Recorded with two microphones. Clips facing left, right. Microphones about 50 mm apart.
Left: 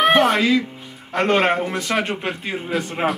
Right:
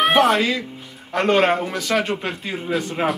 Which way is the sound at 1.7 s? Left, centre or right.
Left.